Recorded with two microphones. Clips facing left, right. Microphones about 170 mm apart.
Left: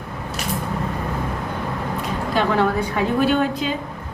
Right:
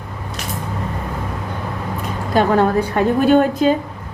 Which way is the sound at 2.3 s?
45° right (ahead or behind).